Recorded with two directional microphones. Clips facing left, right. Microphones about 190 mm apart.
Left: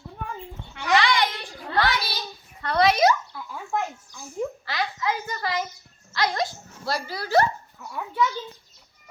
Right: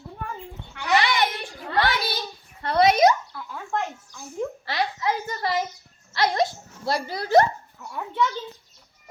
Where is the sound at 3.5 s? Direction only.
10° left (ahead or behind).